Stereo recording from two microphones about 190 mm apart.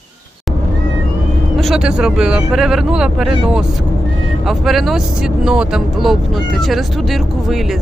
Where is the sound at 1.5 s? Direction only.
Centre (ahead or behind).